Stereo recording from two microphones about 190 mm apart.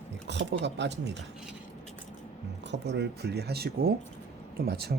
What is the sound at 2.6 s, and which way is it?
Speech, 65° right (ahead or behind).